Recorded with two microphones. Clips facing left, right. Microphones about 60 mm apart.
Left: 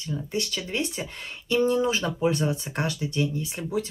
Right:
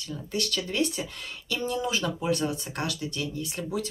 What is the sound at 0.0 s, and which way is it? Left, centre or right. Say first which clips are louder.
Speech: left 2 dB; left.